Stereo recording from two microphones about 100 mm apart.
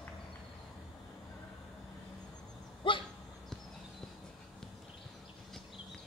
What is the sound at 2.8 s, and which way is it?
Dog, 60° left (ahead or behind).